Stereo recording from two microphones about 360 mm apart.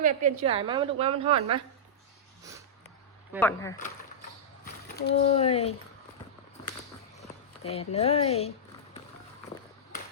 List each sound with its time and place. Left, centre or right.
0.0 s a woman's voice: right
3.3 s speech: centre
4.6 s speech: left
7.6 s speech: centre